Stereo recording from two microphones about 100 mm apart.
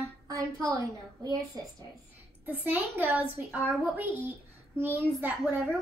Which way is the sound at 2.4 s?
15° right (ahead or behind).